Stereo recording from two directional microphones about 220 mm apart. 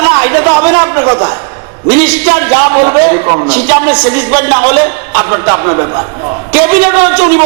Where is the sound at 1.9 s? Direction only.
15° right (ahead or behind).